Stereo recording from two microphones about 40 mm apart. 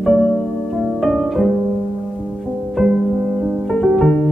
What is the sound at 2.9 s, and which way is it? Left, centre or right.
Music, right.